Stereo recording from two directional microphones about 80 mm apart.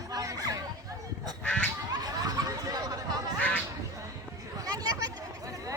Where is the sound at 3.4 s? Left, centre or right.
Centre.